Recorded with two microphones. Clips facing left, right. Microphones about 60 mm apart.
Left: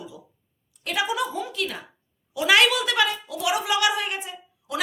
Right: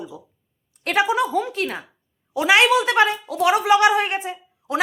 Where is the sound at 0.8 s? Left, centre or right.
Right.